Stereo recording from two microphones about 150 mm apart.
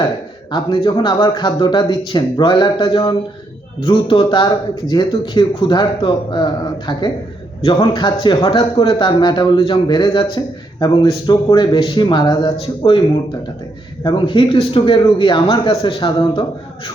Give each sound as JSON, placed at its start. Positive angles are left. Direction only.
{"t": 0.5, "sound": "a man's voice", "side_deg": 35}
{"t": 14.0, "sound": "a man's voice", "side_deg": 35}